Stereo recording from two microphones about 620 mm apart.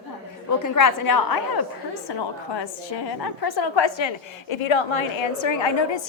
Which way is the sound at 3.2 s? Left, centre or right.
Left.